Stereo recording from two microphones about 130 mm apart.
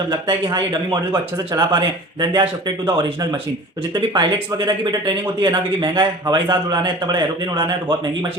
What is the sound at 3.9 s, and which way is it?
A man's voice, 35° right (ahead or behind).